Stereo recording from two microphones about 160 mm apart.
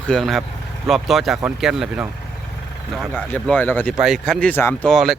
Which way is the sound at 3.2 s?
10° left (ahead or behind).